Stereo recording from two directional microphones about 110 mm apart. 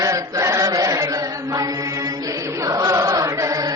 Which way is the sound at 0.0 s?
30° right (ahead or behind).